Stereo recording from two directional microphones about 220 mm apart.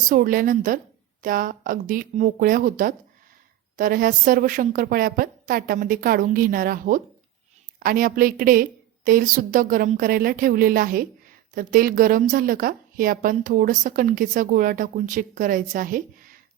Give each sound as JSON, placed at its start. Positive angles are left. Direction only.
{"t": 0.1, "sound": "a woman's voice", "side_deg": -40}